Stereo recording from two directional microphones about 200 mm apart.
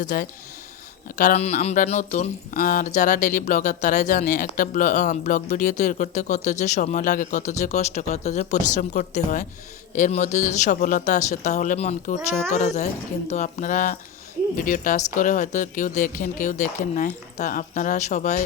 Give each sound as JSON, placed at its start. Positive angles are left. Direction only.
{"t": 0.1, "sound": "speech", "side_deg": 45}